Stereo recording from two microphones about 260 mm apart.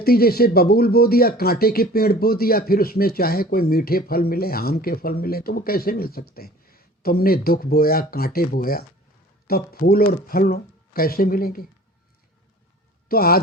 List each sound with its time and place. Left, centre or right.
0.0 s speech: left
13.1 s speech: left